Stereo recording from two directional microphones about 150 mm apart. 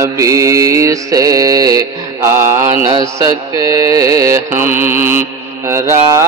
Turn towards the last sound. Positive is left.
turn(degrees=-20)  # may be behind; listen again after turning